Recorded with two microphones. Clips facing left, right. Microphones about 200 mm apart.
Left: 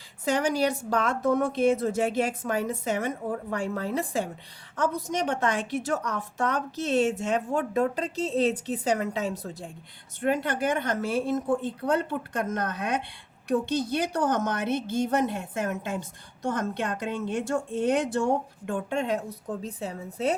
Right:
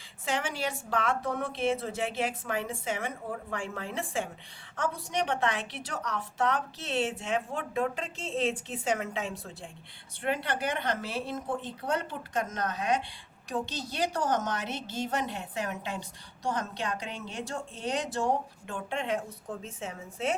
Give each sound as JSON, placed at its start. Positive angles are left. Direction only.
{"t": 0.3, "sound": "a woman's voice", "side_deg": 40}